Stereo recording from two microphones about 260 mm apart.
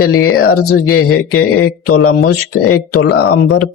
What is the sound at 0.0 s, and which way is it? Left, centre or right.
A man's voice, left.